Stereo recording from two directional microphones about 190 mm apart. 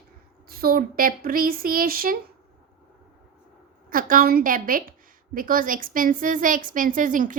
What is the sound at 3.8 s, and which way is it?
A woman's voice, 45° right (ahead or behind).